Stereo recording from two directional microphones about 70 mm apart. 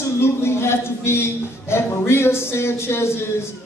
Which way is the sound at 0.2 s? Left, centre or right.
Left.